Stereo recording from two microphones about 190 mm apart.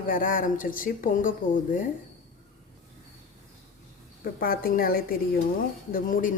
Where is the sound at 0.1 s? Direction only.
45° left (ahead or behind).